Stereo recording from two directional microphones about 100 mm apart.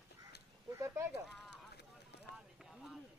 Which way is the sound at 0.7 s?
30° right (ahead or behind).